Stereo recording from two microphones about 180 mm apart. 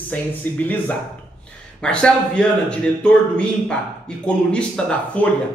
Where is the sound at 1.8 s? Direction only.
5° left (ahead or behind).